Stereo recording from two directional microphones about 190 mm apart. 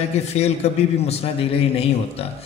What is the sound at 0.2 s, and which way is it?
Speech, 35° left (ahead or behind).